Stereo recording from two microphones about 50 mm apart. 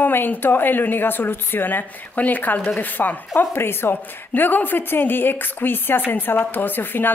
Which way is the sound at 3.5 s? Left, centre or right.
Left.